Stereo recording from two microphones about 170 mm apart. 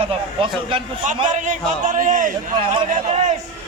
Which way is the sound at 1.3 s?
50° right (ahead or behind).